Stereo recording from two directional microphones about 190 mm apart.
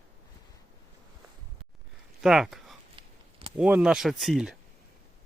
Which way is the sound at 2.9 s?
30° right (ahead or behind).